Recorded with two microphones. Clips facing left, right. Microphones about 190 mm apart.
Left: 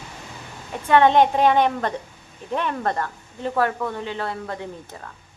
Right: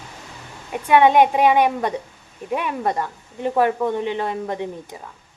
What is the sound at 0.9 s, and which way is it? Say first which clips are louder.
A woman's voice: right 2 dB; 10° right (ahead or behind).